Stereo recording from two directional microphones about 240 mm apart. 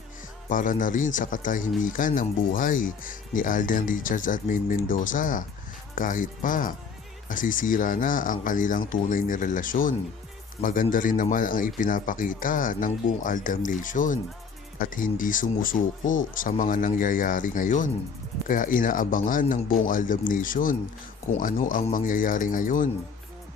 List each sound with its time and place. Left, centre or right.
0.4 s speech: left